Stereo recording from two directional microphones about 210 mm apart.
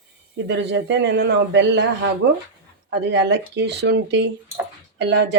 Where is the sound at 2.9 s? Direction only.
55° right (ahead or behind).